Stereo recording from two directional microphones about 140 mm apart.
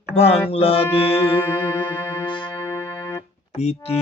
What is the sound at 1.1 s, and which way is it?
Music, 15° left (ahead or behind).